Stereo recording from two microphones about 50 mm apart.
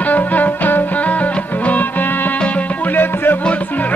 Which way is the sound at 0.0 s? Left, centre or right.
Left.